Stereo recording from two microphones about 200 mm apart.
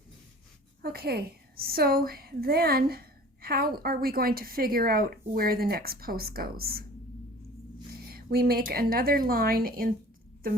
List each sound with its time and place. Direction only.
0.8 s a woman's voice: 50° right (ahead or behind)
8.0 s speech: 50° right (ahead or behind)